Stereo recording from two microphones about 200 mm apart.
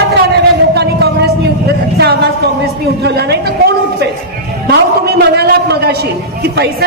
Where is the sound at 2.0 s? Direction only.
50° right (ahead or behind).